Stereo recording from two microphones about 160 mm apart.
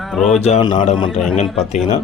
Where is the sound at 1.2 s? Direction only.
Centre (ahead or behind).